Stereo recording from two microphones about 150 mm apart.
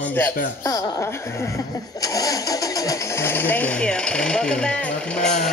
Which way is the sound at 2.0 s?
25° left (ahead or behind).